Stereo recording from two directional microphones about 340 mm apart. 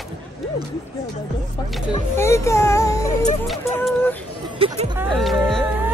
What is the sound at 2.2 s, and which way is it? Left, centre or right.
Speech, centre.